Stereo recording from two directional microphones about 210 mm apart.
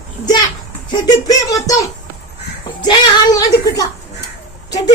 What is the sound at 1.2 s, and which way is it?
A child's voice, 15° left (ahead or behind).